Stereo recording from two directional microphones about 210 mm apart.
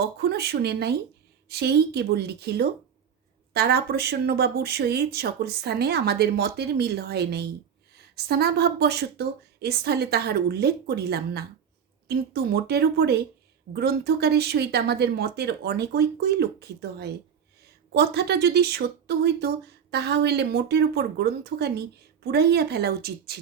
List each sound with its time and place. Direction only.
0.0 s speech: 50° right (ahead or behind)